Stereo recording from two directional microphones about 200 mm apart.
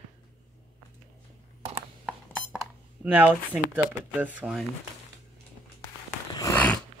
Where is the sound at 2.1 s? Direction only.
5° right (ahead or behind).